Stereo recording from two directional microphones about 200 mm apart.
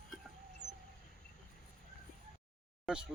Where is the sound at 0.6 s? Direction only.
60° right (ahead or behind).